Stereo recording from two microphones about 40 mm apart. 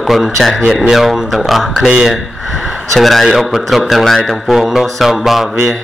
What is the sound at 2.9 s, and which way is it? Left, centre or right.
Speech, centre.